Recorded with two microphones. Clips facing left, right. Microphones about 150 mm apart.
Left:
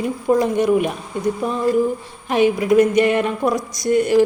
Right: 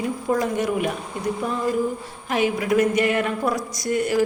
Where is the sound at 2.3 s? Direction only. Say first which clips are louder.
Left 6 dB; 25° left (ahead or behind).